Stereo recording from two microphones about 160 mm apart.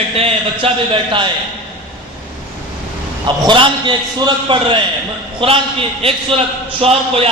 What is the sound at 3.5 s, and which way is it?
A man's voice, 30° right (ahead or behind).